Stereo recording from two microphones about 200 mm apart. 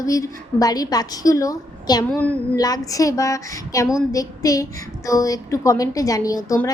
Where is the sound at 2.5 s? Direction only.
20° left (ahead or behind).